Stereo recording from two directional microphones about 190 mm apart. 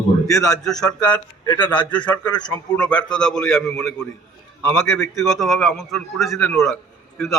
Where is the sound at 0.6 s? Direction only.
5° left (ahead or behind).